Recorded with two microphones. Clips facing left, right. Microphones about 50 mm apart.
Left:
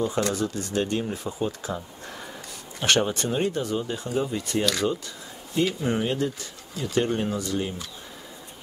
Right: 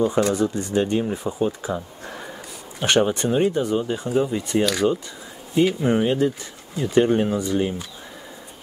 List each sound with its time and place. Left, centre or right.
0.0 s speech: centre